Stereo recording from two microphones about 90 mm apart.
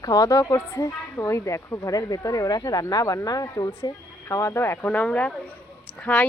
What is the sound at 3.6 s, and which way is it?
Speech, 35° left (ahead or behind).